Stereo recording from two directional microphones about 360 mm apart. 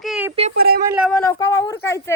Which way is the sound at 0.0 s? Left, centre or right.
Centre.